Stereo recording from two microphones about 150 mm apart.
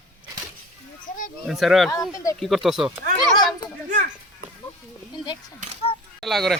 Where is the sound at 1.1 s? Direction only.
55° left (ahead or behind).